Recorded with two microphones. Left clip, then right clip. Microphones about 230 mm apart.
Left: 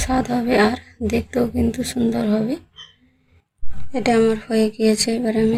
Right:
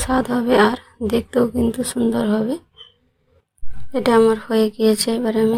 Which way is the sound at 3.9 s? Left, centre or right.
Right.